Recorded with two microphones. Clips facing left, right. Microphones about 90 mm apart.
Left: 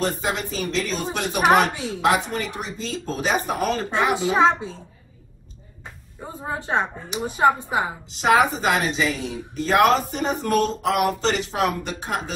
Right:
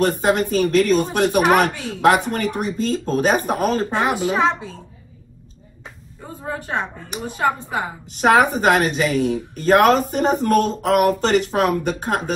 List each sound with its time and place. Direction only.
0.0 s a woman's voice: 55° right (ahead or behind)
4.1 s speech: 20° left (ahead or behind)
6.2 s speech: 20° left (ahead or behind)
8.1 s a woman's voice: 50° right (ahead or behind)